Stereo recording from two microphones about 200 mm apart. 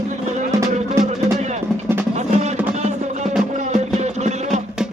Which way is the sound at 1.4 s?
35° right (ahead or behind).